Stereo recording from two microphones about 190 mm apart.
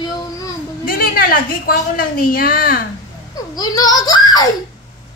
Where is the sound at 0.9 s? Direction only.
50° left (ahead or behind).